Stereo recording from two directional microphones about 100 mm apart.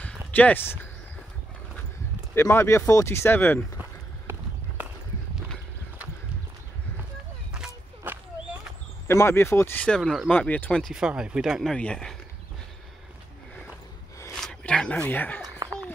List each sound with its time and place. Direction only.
0.0 s a sound: 15° left (ahead or behind)
2.3 s speech: 25° left (ahead or behind)
9.0 s speech: 25° left (ahead or behind)
9.8 s speech: 10° left (ahead or behind)
10.8 s speech: 5° right (ahead or behind)
11.7 s speech: 10° left (ahead or behind)
14.3 s speech: 10° left (ahead or behind)